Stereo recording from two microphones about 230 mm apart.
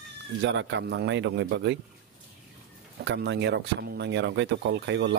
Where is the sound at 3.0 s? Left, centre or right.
Right.